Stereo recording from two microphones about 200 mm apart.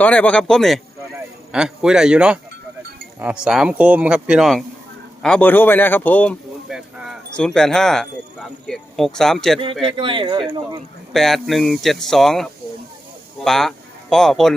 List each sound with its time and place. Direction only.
0.0 s a man's voice: 5° left (ahead or behind)
6.7 s speech: 5° right (ahead or behind)
10.0 s speech: 25° right (ahead or behind)
11.1 s speech: centre (ahead or behind)